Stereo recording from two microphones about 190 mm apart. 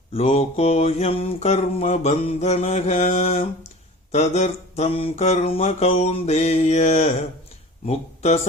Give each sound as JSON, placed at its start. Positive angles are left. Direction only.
{"t": 0.1, "sound": "mantra", "side_deg": 30}